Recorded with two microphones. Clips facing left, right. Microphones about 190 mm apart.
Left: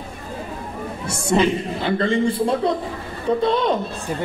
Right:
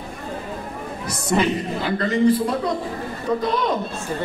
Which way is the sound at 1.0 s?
30° left (ahead or behind).